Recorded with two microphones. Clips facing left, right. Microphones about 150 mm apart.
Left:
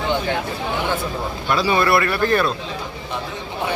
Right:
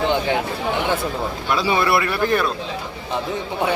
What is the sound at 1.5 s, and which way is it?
Speech, 20° right (ahead or behind).